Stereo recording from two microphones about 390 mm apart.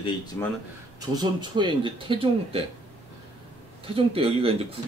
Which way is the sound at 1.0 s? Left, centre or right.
Centre.